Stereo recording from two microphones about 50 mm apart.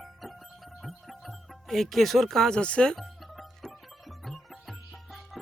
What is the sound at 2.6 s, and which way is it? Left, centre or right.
Speech, centre.